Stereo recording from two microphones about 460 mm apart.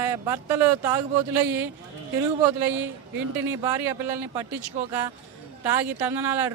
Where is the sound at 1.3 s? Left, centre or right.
Right.